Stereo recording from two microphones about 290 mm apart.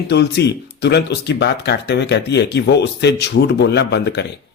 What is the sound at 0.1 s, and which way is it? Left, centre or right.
Speech, left.